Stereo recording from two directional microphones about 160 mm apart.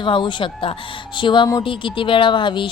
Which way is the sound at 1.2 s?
30° left (ahead or behind).